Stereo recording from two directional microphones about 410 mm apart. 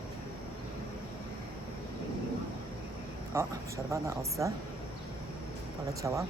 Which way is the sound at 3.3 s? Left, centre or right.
Centre.